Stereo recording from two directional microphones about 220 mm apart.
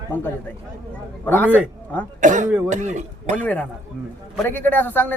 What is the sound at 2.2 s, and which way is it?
A man's voice, 35° right (ahead or behind).